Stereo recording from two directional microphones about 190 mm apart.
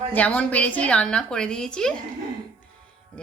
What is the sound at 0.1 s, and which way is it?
A woman's voice, 10° left (ahead or behind).